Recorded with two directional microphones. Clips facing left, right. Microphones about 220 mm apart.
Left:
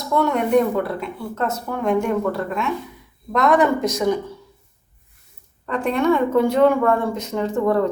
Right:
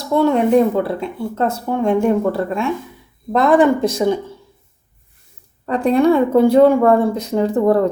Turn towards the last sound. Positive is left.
turn(degrees=-35)  # may be behind; listen again after turning